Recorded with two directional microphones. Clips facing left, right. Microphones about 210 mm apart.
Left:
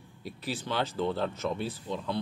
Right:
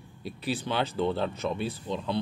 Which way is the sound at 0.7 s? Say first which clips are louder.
Right 1 dB; 20° right (ahead or behind).